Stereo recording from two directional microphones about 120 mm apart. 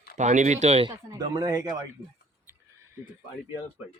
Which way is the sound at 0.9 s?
30° right (ahead or behind).